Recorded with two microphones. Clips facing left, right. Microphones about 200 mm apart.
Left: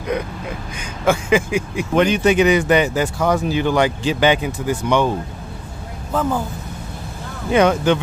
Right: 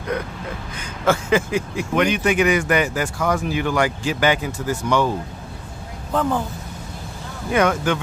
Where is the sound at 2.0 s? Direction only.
30° left (ahead or behind).